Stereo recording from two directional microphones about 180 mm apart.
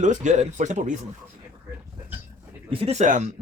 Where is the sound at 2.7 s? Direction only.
35° right (ahead or behind).